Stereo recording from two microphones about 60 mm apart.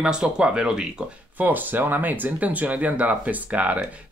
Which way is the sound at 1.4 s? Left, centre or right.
Right.